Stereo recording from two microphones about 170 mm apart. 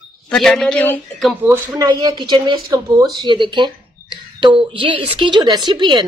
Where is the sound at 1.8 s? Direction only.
25° right (ahead or behind).